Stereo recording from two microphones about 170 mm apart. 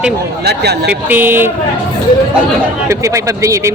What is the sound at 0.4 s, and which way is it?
Speech, 70° right (ahead or behind).